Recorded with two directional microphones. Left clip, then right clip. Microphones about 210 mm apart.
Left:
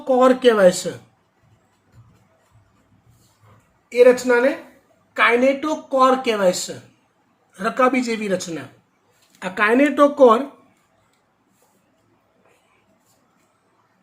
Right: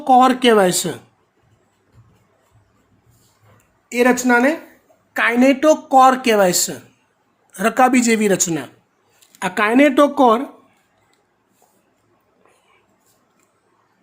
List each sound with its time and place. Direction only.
0.0 s speech: 50° right (ahead or behind)
3.8 s speech: 55° right (ahead or behind)